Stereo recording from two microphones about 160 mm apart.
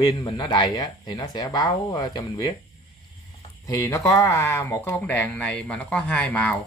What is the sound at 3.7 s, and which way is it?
Speech, 20° left (ahead or behind).